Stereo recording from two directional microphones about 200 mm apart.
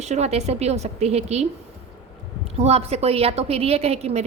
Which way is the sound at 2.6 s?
30° right (ahead or behind).